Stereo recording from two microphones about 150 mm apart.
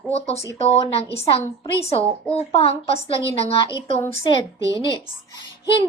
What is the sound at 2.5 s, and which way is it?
Speech, 40° left (ahead or behind).